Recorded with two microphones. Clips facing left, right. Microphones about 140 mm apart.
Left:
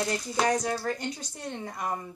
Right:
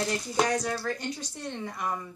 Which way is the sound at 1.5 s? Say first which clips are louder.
Even; 35° left (ahead or behind).